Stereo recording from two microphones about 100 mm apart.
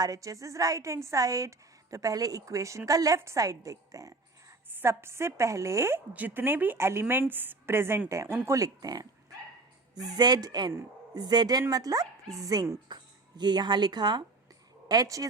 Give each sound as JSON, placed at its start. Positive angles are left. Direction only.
{"t": 0.0, "sound": "a woman's voice", "side_deg": -35}
{"t": 12.9, "sound": "speech", "side_deg": -45}